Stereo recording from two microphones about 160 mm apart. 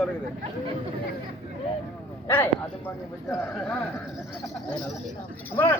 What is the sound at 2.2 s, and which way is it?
Speech, 15° left (ahead or behind).